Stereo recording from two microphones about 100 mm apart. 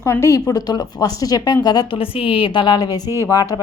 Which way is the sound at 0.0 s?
25° left (ahead or behind).